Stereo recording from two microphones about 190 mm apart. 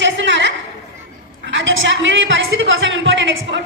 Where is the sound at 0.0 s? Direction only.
70° right (ahead or behind).